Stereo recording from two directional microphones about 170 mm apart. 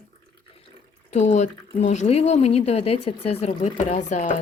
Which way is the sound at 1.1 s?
40° left (ahead or behind).